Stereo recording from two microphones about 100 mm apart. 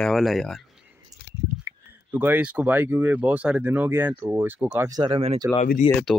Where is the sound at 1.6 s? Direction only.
20° right (ahead or behind).